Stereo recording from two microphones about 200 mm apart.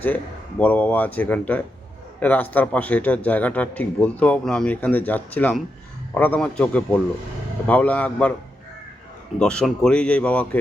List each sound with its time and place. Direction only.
0.6 s speech: 5° left (ahead or behind)
9.4 s speech: 5° left (ahead or behind)